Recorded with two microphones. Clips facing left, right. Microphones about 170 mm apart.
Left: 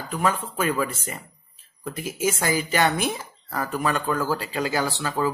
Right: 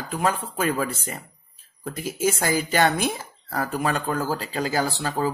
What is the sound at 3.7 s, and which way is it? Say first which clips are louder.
Speech: left 1 dB; 35° right (ahead or behind).